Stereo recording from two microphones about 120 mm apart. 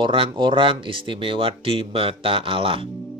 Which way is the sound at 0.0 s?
45° right (ahead or behind).